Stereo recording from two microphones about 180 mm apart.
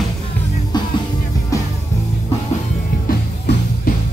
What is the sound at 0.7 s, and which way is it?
Music, 25° left (ahead or behind).